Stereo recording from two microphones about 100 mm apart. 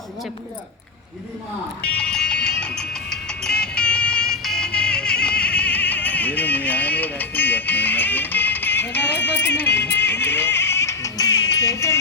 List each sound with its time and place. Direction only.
2.0 s music: 10° left (ahead or behind); by 11.9 s 30° left (ahead or behind)